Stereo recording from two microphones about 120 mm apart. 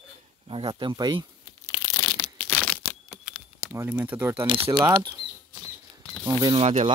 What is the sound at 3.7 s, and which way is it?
Speech, 20° right (ahead or behind).